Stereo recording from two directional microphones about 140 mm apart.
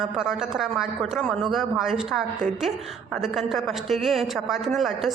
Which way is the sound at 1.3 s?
Centre (ahead or behind).